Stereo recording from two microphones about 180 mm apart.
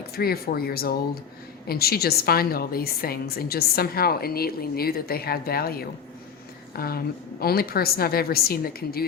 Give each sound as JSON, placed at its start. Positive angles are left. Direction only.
{"t": 0.2, "sound": "a woman's voice", "side_deg": 60}